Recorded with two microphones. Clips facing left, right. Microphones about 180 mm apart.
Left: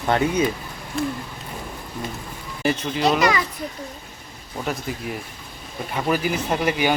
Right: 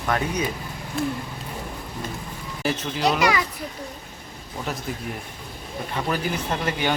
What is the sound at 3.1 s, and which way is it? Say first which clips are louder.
Speech: left 2 dB; 10° right (ahead or behind).